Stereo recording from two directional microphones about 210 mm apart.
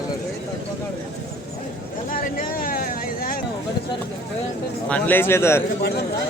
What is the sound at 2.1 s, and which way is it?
Vehicle, 40° left (ahead or behind).